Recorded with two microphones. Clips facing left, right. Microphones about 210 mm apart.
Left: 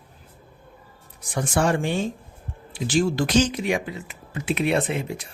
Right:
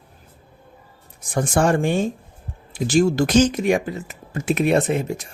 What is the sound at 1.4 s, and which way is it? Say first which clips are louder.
Speech: right 4 dB; 45° right (ahead or behind).